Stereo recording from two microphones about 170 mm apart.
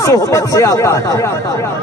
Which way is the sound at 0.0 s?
20° left (ahead or behind).